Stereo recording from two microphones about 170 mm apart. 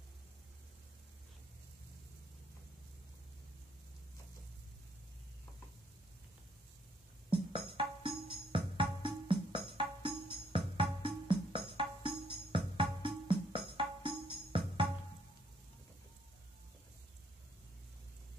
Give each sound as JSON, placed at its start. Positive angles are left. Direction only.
{"t": 7.2, "sound": "music", "side_deg": -30}